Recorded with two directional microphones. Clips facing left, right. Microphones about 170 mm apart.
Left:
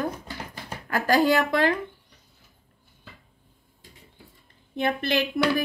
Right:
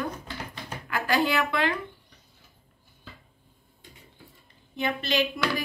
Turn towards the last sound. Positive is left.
turn(degrees=55)  # may be behind; listen again after turning